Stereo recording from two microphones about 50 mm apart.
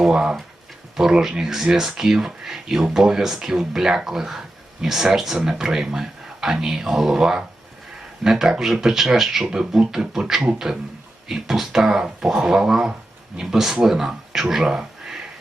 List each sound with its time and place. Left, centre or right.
0.0 s speech: centre